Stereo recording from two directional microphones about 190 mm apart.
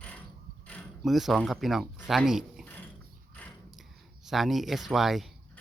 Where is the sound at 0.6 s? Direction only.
5° left (ahead or behind).